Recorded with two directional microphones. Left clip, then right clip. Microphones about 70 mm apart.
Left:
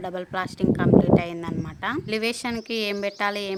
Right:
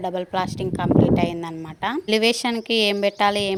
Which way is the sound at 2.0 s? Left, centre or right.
Right.